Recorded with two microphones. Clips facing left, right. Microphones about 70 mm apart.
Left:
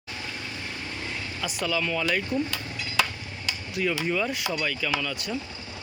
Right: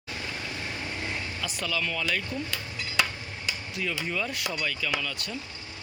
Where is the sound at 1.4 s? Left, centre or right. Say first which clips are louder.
Left 5 dB; centre.